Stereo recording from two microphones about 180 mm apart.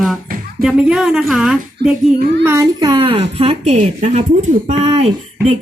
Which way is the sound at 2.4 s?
15° right (ahead or behind).